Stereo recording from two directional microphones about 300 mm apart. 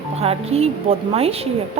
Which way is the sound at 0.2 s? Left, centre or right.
Centre.